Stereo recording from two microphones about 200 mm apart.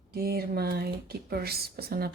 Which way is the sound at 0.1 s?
50° right (ahead or behind).